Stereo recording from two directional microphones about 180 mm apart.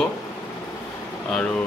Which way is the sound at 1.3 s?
5° left (ahead or behind).